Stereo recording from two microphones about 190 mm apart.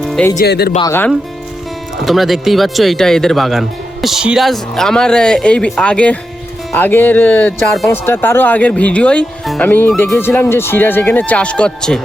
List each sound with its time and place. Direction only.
0.0 s music: centre (ahead or behind)
0.3 s speech: 60° left (ahead or behind)
0.8 s speech: 15° left (ahead or behind)
2.0 s speech: centre (ahead or behind)